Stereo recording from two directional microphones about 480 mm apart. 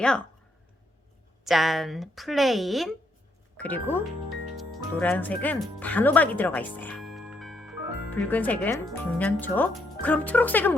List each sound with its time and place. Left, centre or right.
1.5 s a woman's voice: centre